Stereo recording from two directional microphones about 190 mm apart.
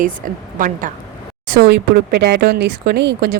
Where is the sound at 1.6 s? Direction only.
60° right (ahead or behind).